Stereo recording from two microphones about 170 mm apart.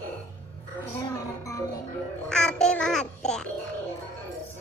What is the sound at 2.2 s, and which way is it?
Babbling, 5° left (ahead or behind).